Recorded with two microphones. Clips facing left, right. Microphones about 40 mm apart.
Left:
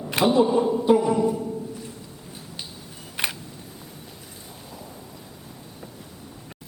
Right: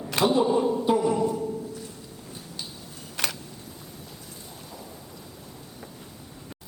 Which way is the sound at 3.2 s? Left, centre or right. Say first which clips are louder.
Left 2 dB; left.